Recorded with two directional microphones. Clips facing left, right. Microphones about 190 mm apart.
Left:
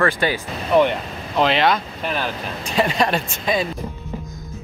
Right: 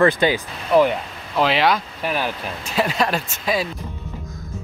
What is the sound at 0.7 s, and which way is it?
Speech, centre (ahead or behind).